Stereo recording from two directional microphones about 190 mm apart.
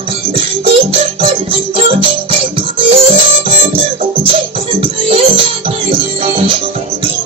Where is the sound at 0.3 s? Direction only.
30° right (ahead or behind).